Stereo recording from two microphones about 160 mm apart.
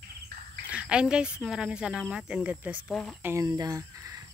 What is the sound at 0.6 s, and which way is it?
Speech, 5° right (ahead or behind).